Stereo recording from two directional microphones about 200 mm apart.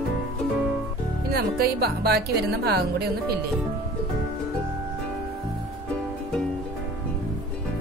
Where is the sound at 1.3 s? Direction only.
50° right (ahead or behind).